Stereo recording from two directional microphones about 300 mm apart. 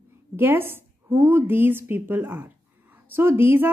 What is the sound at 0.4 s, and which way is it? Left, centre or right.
A woman's voice, centre.